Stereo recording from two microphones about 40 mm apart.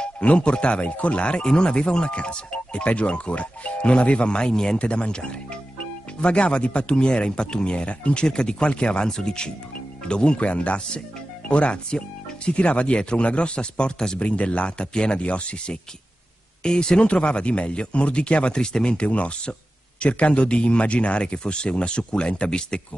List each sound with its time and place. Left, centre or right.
0.0 s speech: left
14.2 s speech: left
17.0 s speech: left
19.0 s speech: left